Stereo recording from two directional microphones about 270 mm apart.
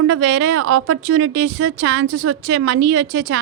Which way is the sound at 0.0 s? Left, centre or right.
Right.